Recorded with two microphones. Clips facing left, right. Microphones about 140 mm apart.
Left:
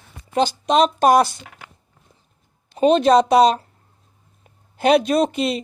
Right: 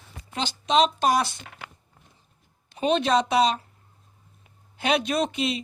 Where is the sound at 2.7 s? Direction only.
40° left (ahead or behind).